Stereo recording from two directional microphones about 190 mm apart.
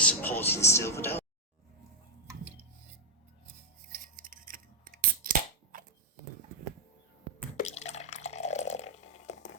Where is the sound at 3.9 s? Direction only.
45° right (ahead or behind).